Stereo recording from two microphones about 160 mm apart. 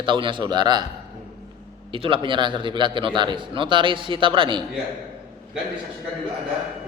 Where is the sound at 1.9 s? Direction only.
35° right (ahead or behind).